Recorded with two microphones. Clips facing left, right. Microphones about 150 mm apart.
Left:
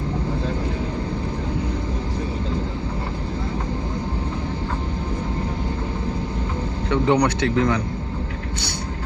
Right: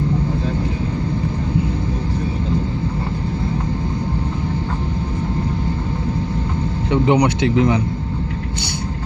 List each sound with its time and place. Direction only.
6.9 s speech: 20° right (ahead or behind)